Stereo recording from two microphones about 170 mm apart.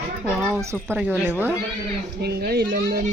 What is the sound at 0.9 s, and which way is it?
Speech, 10° right (ahead or behind).